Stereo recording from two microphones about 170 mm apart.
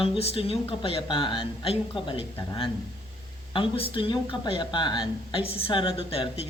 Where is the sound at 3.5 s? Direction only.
30° left (ahead or behind).